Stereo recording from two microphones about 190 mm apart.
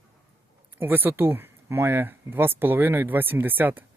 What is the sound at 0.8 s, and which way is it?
Speech, 10° right (ahead or behind).